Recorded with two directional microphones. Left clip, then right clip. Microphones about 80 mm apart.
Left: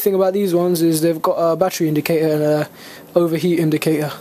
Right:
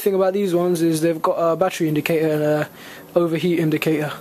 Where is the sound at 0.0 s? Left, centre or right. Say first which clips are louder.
Left 2 dB; left.